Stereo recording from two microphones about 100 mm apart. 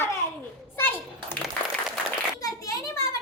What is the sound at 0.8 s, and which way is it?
Children playing, 20° left (ahead or behind).